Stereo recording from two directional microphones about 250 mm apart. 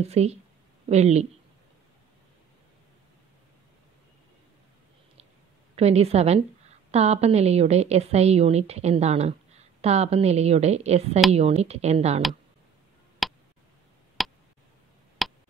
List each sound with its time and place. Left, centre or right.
0.0 s a woman's voice: right
5.8 s a woman's voice: right
13.2 s tick: centre
15.2 s a sound: centre